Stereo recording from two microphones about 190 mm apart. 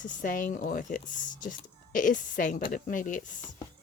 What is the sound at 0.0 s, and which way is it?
Speech, 45° left (ahead or behind).